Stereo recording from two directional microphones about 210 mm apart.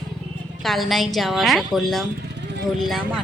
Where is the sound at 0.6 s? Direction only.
Centre (ahead or behind).